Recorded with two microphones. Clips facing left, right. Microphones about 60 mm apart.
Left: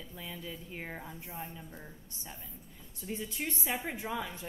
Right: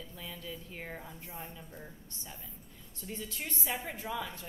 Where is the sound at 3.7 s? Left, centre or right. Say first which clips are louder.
Left 1 dB; left.